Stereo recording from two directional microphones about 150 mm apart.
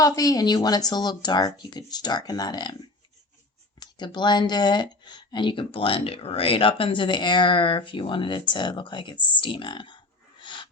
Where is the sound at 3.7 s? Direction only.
30° left (ahead or behind).